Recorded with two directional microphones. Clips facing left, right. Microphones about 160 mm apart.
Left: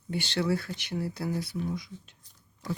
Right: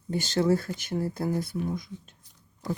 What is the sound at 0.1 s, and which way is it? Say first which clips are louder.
Speech: right 4 dB; 45° right (ahead or behind).